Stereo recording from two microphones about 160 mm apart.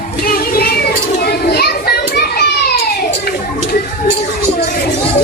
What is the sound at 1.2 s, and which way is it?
Children playing, 80° left.